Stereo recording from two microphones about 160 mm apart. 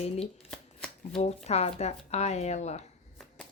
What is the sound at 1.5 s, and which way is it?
Speech, 40° left (ahead or behind).